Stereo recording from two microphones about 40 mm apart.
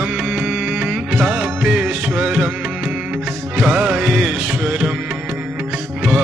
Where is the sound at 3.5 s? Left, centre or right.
Right.